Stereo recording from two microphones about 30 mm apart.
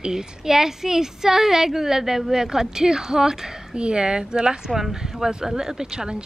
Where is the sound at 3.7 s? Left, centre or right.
Right.